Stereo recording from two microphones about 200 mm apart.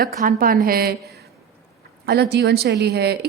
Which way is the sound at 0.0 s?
45° right (ahead or behind).